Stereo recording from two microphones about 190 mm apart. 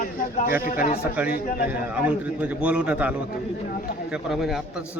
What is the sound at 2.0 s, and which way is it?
A man's voice, 5° right (ahead or behind).